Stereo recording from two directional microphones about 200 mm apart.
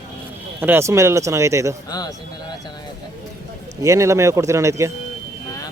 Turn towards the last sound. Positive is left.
turn(degrees=-15)  # may be behind; listen again after turning